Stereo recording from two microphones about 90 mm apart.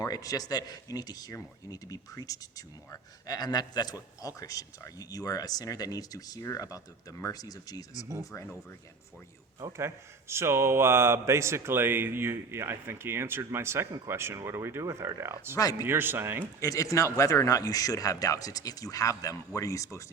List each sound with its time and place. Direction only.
0.0 s speech: 45° left (ahead or behind)
9.6 s speech: 35° right (ahead or behind)
16.6 s speech: 35° left (ahead or behind)